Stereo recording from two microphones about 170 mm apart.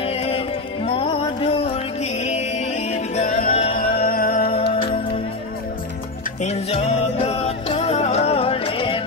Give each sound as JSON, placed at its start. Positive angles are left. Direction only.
{"t": 0.0, "sound": "music", "side_deg": 35}
{"t": 4.7, "sound": "music", "side_deg": 30}
{"t": 6.4, "sound": "music", "side_deg": 35}